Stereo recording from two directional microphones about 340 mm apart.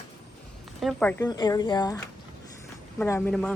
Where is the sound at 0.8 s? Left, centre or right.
Centre.